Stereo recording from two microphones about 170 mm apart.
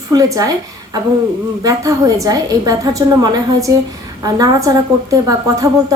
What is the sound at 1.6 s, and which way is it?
A woman's voice, 20° right (ahead or behind).